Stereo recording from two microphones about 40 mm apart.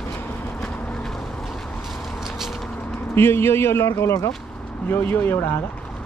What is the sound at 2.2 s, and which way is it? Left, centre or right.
Vehicle, centre.